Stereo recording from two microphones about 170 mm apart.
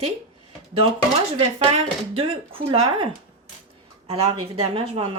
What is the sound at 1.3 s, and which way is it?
Speech, 35° right (ahead or behind).